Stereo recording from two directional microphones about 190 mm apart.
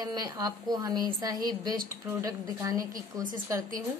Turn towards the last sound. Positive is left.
turn(degrees=-20)  # may be behind; listen again after turning